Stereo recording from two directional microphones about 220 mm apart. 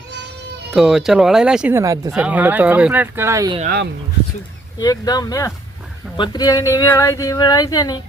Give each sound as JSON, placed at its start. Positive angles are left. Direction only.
{"t": 0.7, "sound": "speech", "side_deg": 0}
{"t": 4.8, "sound": "speech", "side_deg": 15}